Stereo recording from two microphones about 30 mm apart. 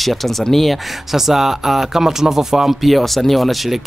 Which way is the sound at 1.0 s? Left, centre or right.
Centre.